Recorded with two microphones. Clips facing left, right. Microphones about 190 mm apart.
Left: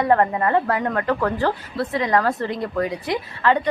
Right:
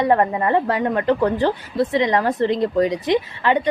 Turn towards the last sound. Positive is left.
turn(degrees=-20)  # may be behind; listen again after turning